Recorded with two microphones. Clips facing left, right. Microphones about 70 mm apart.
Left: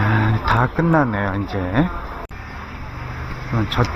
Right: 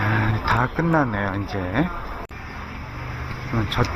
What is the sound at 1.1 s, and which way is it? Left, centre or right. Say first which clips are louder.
Speech: left 3 dB; left.